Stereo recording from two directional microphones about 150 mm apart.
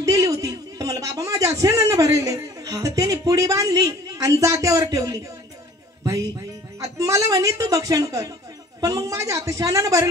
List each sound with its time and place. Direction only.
0.0 s a man's voice: 20° right (ahead or behind)
6.8 s a woman's voice: 20° right (ahead or behind)